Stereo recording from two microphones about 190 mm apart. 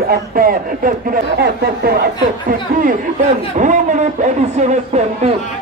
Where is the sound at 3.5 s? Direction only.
40° right (ahead or behind).